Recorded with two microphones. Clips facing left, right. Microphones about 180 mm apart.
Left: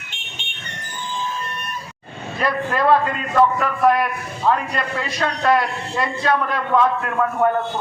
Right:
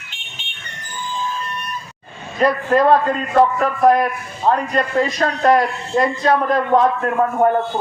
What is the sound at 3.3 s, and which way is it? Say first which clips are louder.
A man's voice: right 2 dB; 35° right (ahead or behind).